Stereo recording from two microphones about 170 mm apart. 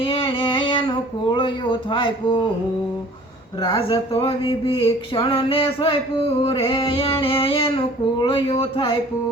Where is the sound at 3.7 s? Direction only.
30° left (ahead or behind).